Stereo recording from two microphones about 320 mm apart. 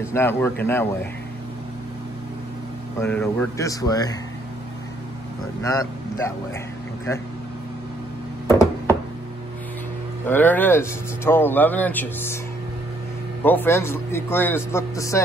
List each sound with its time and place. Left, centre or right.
0.1 s a man's voice: centre
3.0 s a man's voice: centre
5.6 s a man's voice: centre
8.5 s a sound: centre
10.2 s speech: centre
13.4 s a man's voice: centre